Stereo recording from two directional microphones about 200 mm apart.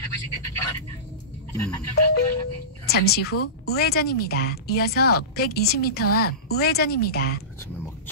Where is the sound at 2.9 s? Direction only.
50° left (ahead or behind).